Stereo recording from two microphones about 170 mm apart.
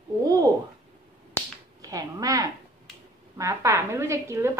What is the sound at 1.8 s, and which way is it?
A woman's voice, 20° right (ahead or behind).